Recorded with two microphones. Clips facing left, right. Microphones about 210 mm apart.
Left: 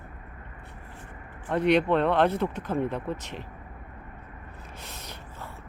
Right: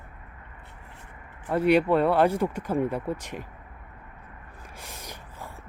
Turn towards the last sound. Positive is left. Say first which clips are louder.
# even
turn(degrees=-10)  # may be behind; listen again after turning